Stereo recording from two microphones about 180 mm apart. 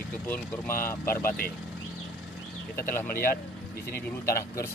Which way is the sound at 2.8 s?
15° left (ahead or behind).